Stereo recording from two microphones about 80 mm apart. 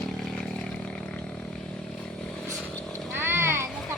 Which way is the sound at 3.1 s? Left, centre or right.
Right.